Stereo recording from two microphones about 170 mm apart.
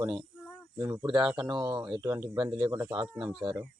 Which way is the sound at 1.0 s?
30° right (ahead or behind).